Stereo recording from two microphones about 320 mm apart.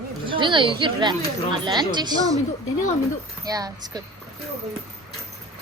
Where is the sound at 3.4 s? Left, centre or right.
Centre.